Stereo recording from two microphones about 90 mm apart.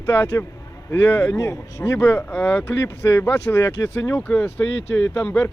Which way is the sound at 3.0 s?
30° left (ahead or behind).